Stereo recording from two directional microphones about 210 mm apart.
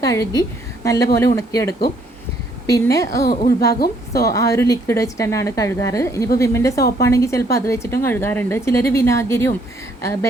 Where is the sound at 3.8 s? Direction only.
50° left (ahead or behind).